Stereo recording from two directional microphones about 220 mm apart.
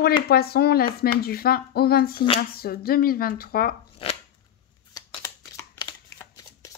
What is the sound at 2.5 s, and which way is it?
Speech, 45° left (ahead or behind).